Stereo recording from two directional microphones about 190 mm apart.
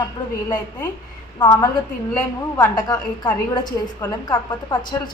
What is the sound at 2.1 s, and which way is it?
Speech, 10° left (ahead or behind).